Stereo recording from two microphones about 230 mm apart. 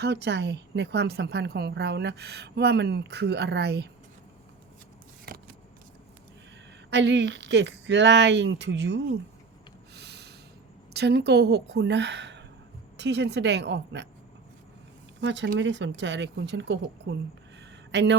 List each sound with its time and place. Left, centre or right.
0.0 s a woman's voice: right
6.9 s a woman's voice: right
9.9 s snort: right
10.9 s a woman's voice: right
15.2 s a woman's voice: right
17.9 s a woman's voice: right